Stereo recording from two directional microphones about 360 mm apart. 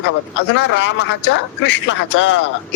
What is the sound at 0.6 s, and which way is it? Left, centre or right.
A man's voice, left.